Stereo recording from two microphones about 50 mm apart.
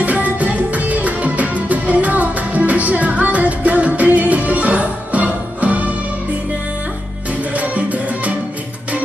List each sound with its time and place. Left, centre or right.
0.0 s music: right
7.5 s music: right